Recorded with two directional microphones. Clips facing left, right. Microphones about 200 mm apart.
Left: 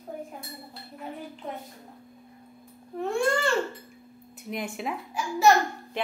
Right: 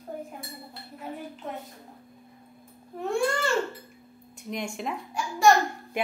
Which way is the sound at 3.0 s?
Centre (ahead or behind).